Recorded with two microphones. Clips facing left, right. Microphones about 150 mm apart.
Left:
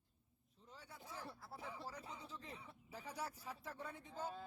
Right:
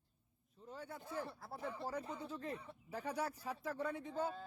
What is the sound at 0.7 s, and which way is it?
Speech, 55° right (ahead or behind).